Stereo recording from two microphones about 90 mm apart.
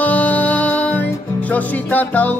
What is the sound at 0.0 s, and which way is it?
Music, 15° left (ahead or behind).